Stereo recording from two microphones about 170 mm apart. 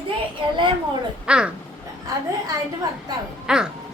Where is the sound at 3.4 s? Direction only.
5° right (ahead or behind).